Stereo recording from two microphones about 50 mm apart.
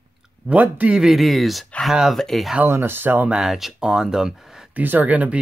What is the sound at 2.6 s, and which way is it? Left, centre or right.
Speech, right.